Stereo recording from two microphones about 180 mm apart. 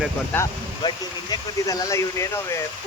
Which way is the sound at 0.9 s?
20° left (ahead or behind).